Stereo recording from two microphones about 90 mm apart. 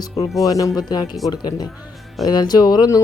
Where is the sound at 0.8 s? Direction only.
50° left (ahead or behind).